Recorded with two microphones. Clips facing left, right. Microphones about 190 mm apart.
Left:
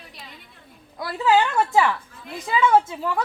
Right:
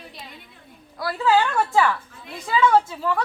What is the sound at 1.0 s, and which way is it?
A woman's voice, 20° left (ahead or behind).